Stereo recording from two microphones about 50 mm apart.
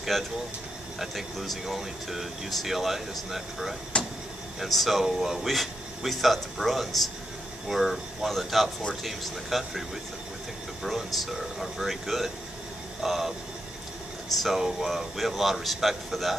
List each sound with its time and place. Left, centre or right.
0.9 s speech: centre
3.9 s vehicle: left
4.6 s speech: centre
14.4 s speech: centre